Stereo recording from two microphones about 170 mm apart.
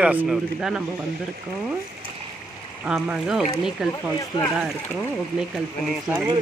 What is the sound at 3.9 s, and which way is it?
Speech, 20° left (ahead or behind).